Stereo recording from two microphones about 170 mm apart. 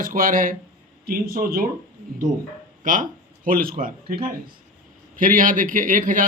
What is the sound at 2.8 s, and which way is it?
Speech, 50° right (ahead or behind).